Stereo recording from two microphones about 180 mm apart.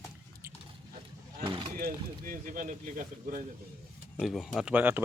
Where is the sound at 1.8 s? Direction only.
50° right (ahead or behind).